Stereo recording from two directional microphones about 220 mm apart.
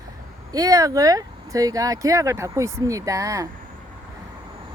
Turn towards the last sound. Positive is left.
turn(degrees=-15)  # may be behind; listen again after turning